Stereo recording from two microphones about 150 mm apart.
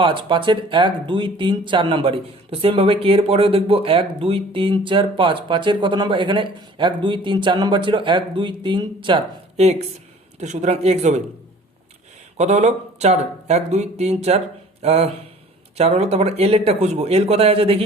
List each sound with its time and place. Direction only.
0.0 s speech: 35° right (ahead or behind)
10.4 s speech: 50° right (ahead or behind)
12.4 s speech: 50° right (ahead or behind)